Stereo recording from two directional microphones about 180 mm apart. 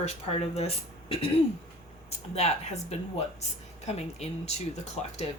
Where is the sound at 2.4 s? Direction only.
35° left (ahead or behind).